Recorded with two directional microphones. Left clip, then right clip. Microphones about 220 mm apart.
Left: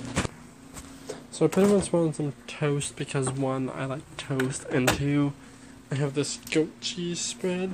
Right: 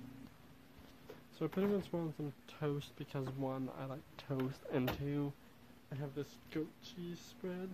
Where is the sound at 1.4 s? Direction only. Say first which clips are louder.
Left 16 dB; 10° right (ahead or behind).